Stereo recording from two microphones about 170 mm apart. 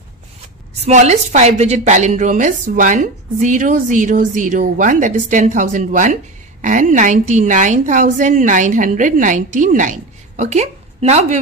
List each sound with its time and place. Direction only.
0.8 s a woman's voice: 40° right (ahead or behind)